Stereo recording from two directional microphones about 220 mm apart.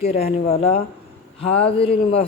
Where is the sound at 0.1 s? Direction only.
45° left (ahead or behind).